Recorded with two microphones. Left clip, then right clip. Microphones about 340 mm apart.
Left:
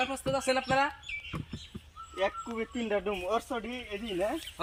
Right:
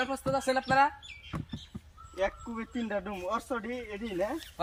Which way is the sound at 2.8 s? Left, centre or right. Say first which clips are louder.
Left 3 dB; centre.